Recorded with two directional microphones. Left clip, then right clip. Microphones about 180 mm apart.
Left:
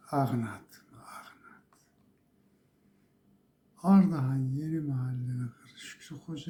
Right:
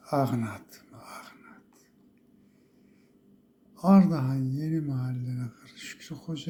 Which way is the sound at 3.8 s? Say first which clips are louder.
Right 4 dB; 20° right (ahead or behind).